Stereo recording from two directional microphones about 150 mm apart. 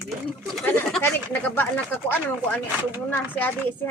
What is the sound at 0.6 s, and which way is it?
Speech, 15° left (ahead or behind).